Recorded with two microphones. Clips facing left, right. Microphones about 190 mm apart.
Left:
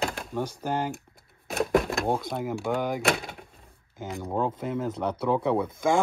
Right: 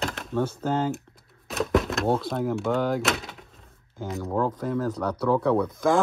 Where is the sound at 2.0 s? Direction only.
15° left (ahead or behind).